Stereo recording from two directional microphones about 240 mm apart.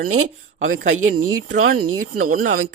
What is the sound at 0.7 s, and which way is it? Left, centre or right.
Speech, right.